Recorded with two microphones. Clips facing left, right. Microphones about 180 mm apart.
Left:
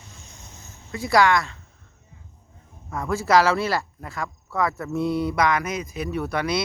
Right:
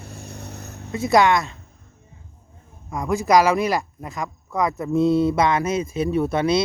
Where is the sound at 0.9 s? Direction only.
20° right (ahead or behind).